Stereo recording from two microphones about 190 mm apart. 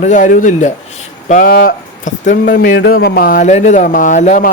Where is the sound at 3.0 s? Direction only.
50° left (ahead or behind).